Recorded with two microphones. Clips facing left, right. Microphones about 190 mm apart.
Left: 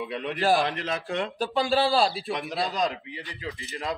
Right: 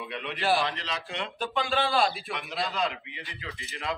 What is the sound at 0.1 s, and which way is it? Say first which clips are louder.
Speech: left 3 dB; 40° left (ahead or behind).